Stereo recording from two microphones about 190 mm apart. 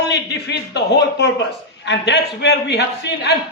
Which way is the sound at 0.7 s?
60° left (ahead or behind).